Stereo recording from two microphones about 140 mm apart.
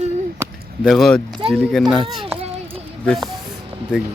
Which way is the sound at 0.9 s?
Centre (ahead or behind).